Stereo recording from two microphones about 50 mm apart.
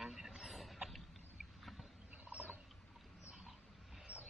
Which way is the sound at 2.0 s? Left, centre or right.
Right.